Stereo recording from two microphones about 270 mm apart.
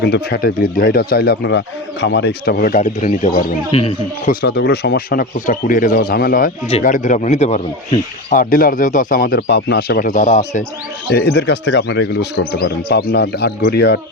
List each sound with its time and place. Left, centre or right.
0.0 s speech: left
4.4 s speech: left